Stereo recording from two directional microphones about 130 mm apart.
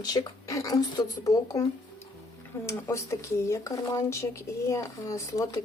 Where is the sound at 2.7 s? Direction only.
20° left (ahead or behind).